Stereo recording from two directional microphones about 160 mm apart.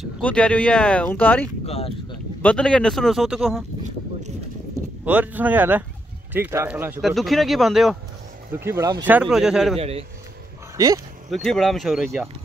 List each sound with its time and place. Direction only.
0.2 s speech: 5° left (ahead or behind)
1.7 s speech: 35° left (ahead or behind)
2.4 s speech: 5° left (ahead or behind)
5.0 s speech: 10° right (ahead or behind)
7.0 s speech: centre (ahead or behind)
8.5 s speech: 15° right (ahead or behind)
9.0 s speech: 5° right (ahead or behind)
9.8 s speech: 40° right (ahead or behind)
11.2 s speech: centre (ahead or behind)